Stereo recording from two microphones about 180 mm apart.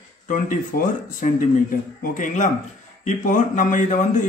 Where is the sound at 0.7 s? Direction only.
55° left (ahead or behind).